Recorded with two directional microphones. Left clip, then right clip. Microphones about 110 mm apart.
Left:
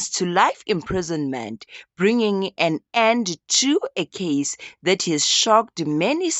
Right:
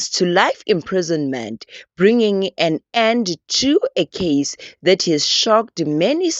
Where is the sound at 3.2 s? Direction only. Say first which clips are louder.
Right 2 dB; 20° right (ahead or behind).